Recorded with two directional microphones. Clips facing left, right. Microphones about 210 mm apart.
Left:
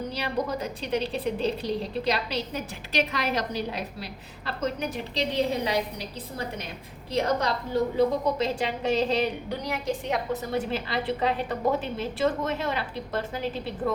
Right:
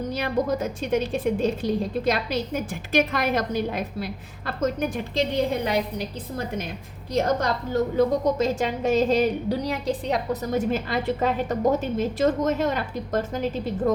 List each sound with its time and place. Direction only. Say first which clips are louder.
0.1 s a woman's voice: right 7 dB; 50° right (ahead or behind)
7.1 s a woman's voice: right 3 dB; 50° right (ahead or behind)